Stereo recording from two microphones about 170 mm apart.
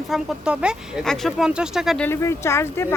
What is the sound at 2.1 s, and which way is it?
Speech, 15° left (ahead or behind).